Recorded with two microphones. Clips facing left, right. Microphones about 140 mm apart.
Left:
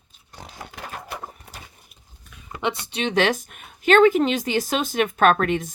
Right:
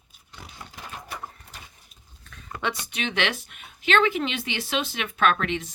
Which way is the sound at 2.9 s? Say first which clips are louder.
Left 9 dB; 35° left (ahead or behind).